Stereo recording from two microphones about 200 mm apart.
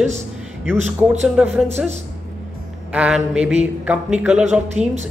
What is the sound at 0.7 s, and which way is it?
Speech, 35° right (ahead or behind).